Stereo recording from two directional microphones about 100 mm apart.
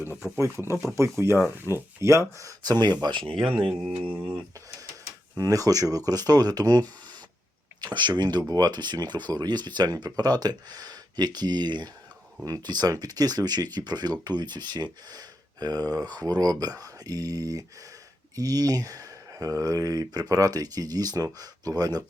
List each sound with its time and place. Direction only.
0.3 s speech: 30° right (ahead or behind); by 3.5 s 65° right (ahead or behind)
4.0 s speech: 15° right (ahead or behind)
5.4 s speech: 35° right (ahead or behind)